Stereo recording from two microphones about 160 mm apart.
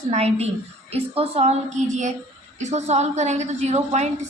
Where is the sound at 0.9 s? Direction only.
40° right (ahead or behind).